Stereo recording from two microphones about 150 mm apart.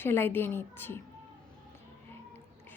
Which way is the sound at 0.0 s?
15° left (ahead or behind).